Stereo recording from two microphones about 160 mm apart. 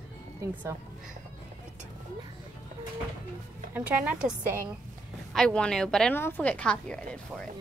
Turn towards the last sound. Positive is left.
turn(degrees=5)  # may be behind; listen again after turning